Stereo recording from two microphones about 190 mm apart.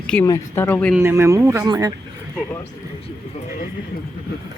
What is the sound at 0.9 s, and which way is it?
Speech, 15° right (ahead or behind).